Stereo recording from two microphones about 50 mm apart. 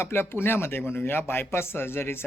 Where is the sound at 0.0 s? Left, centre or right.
Left.